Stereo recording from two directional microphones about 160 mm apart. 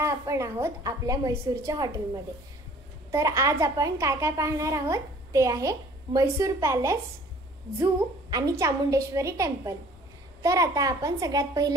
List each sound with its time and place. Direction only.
0.0 s a child's voice: 20° right (ahead or behind)
3.1 s a child's voice: 15° right (ahead or behind)